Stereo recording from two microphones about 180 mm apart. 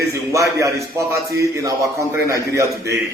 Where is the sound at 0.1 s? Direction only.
15° right (ahead or behind).